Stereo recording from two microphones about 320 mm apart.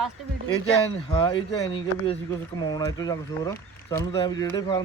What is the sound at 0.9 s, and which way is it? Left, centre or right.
Speech, centre.